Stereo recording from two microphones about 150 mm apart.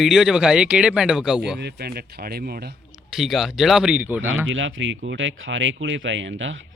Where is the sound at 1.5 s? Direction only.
90° right.